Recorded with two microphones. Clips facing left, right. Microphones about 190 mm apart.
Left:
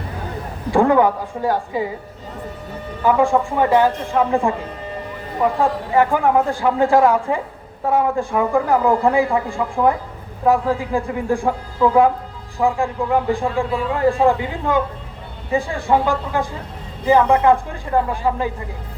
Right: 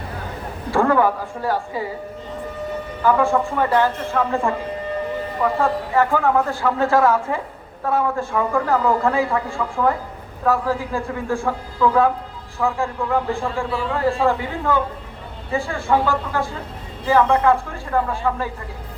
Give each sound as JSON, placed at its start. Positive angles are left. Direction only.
{"t": 0.7, "sound": "a man's voice", "side_deg": 15}
{"t": 3.0, "sound": "a man's voice", "side_deg": 15}